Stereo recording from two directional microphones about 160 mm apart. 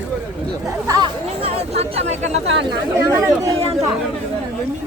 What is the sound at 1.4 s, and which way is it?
A man's voice, 40° right (ahead or behind).